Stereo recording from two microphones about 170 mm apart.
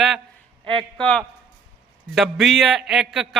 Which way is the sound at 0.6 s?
30° right (ahead or behind).